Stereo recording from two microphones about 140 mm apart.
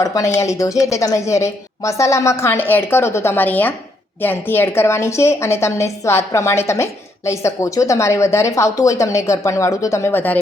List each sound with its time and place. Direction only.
0.0 s a woman's voice: 20° left (ahead or behind)